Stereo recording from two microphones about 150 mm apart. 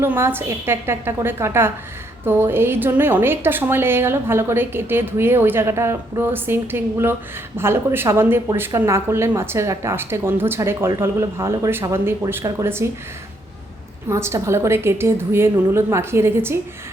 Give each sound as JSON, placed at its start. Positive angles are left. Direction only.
{"t": 0.0, "sound": "a woman's voice", "side_deg": -15}
{"t": 14.1, "sound": "a woman's voice", "side_deg": -20}